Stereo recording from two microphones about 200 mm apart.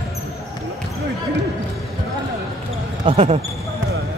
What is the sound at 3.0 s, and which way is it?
Speech, 30° right (ahead or behind).